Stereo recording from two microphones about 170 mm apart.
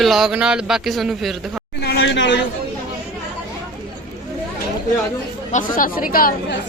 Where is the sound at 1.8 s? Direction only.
80° left.